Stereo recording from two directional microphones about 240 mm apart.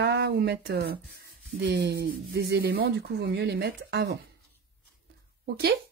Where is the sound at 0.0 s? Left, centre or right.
Right.